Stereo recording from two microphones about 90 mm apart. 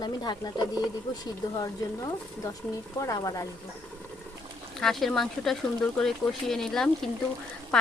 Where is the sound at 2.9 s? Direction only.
40° left (ahead or behind).